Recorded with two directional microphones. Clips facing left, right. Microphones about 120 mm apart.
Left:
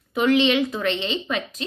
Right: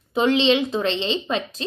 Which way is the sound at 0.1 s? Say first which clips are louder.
Right 1 dB; 25° right (ahead or behind).